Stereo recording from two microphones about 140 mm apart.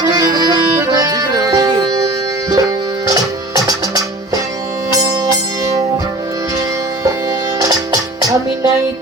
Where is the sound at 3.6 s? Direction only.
25° right (ahead or behind).